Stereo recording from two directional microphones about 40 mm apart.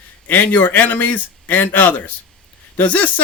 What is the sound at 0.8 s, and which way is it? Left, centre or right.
Speech, left.